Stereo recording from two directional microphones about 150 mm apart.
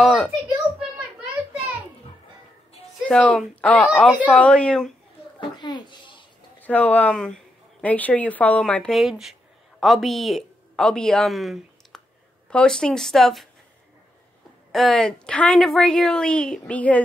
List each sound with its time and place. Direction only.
0.0 s a woman's voice: centre (ahead or behind)
0.7 s a sound: 5° right (ahead or behind)
3.1 s speech: 5° left (ahead or behind)
5.6 s a child's voice: 30° left (ahead or behind)
6.6 s a woman's voice: 10° left (ahead or behind)
14.7 s a woman's voice: centre (ahead or behind)